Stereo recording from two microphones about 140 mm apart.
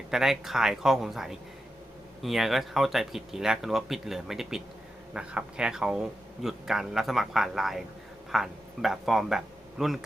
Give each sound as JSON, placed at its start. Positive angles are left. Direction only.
{"t": 0.1, "sound": "speech", "side_deg": -5}